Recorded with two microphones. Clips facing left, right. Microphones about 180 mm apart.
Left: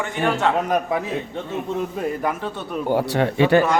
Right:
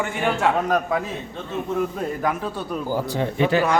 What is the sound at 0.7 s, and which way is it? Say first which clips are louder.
Speech: even; 15° left (ahead or behind).